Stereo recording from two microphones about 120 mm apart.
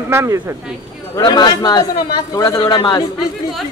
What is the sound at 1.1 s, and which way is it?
A man's voice, 35° left (ahead or behind).